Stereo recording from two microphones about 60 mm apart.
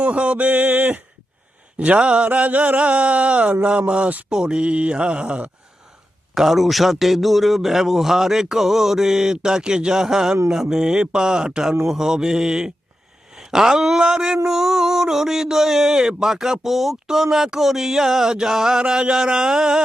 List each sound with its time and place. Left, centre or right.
0.0 s mantra: right
4.3 s speech: centre
6.3 s speech: centre